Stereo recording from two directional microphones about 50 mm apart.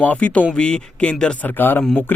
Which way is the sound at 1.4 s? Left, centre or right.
Left.